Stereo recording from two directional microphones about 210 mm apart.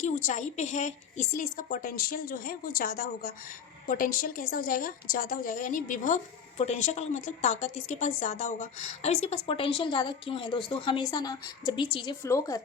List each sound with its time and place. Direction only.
0.0 s a woman's voice: 35° left (ahead or behind); by 12.6 s 15° left (ahead or behind)